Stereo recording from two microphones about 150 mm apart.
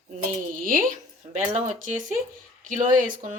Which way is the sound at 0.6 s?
70° right (ahead or behind).